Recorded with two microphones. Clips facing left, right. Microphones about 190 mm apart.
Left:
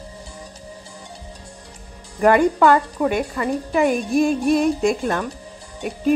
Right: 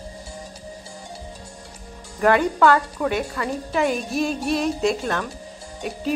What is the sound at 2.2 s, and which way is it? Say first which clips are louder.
Speech: left 3 dB; 10° left (ahead or behind).